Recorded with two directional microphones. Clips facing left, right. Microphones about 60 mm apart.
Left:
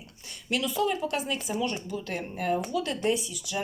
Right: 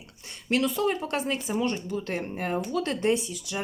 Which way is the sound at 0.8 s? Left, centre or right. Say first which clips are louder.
Right 1 dB; right.